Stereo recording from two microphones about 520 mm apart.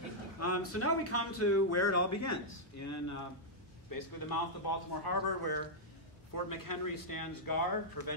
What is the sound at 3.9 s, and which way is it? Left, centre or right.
A man's voice, left.